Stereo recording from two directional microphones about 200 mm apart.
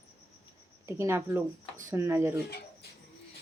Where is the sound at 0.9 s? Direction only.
10° right (ahead or behind).